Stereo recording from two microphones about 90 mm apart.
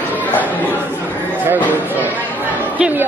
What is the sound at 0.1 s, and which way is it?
Chatter, 20° left (ahead or behind).